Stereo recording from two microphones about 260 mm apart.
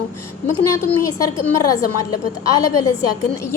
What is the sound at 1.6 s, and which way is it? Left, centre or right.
A woman's voice, left.